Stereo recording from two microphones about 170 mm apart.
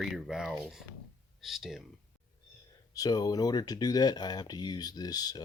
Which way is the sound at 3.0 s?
25° left (ahead or behind).